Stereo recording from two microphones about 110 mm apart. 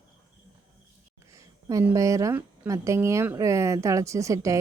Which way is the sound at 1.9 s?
30° right (ahead or behind).